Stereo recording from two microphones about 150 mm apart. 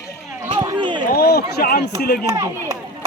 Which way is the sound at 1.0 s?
80° left.